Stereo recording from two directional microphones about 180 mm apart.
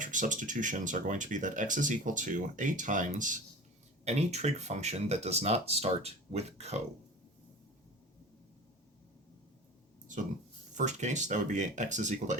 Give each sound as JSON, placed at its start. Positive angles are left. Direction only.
{"t": 0.0, "sound": "speech", "side_deg": -45}
{"t": 10.8, "sound": "speech", "side_deg": -40}